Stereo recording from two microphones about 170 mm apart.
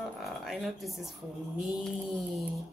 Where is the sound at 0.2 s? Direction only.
Centre (ahead or behind).